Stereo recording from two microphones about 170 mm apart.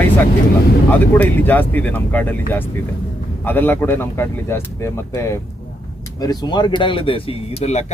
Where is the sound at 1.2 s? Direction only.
10° left (ahead or behind).